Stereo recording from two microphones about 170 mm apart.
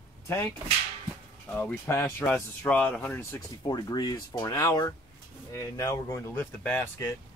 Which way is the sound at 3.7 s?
25° left (ahead or behind).